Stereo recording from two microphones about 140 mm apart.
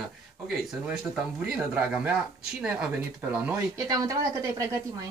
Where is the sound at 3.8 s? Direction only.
25° right (ahead or behind).